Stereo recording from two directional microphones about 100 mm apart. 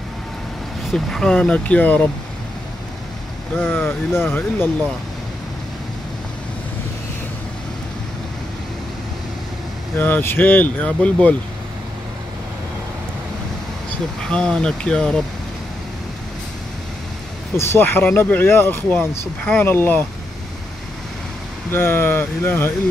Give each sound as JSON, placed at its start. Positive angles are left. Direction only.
{"t": 0.8, "sound": "speech", "side_deg": 5}
{"t": 3.5, "sound": "speech", "side_deg": 20}
{"t": 9.9, "sound": "speech", "side_deg": 20}
{"t": 14.3, "sound": "speech", "side_deg": 10}
{"t": 17.6, "sound": "speech", "side_deg": 25}
{"t": 21.6, "sound": "speech", "side_deg": 25}